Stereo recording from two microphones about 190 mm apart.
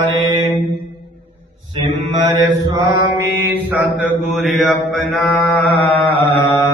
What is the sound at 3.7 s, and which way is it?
Mantra, 5° right (ahead or behind).